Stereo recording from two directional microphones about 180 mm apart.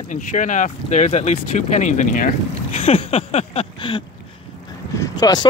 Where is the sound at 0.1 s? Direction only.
45° left (ahead or behind).